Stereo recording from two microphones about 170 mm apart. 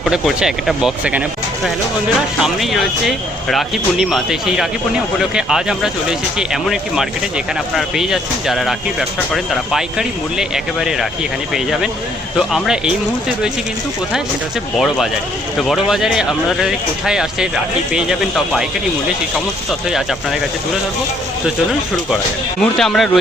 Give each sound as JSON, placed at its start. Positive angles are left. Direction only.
{"t": 0.0, "sound": "speech", "side_deg": 0}
{"t": 2.4, "sound": "speech", "side_deg": 0}
{"t": 14.8, "sound": "speech", "side_deg": 0}
{"t": 21.4, "sound": "speech", "side_deg": 0}